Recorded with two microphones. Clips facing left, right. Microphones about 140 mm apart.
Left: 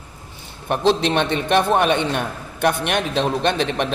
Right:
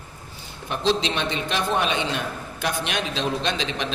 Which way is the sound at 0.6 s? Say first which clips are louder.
Left 5 dB; 55° left (ahead or behind).